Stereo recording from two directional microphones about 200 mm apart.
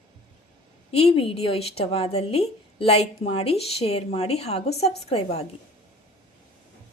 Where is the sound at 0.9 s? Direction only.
30° left (ahead or behind).